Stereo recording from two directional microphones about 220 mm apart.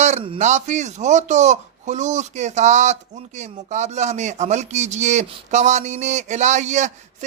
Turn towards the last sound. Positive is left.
turn(degrees=-30)  # may be behind; listen again after turning